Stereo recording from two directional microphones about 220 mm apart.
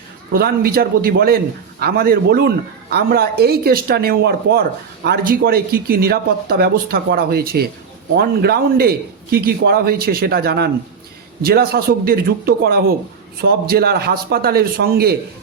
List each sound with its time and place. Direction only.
0.3 s speech: 45° right (ahead or behind)